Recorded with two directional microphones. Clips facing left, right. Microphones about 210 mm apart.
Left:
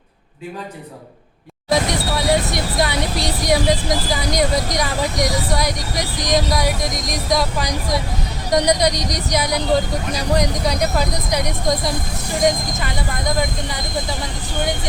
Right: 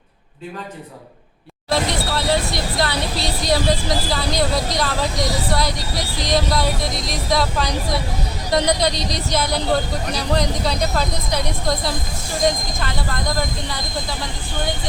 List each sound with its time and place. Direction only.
1.7 s speech: 15° left (ahead or behind)